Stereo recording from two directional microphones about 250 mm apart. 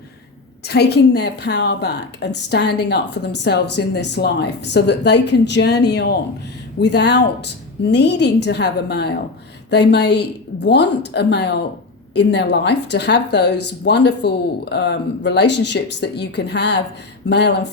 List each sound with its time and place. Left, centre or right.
0.6 s a woman's voice: left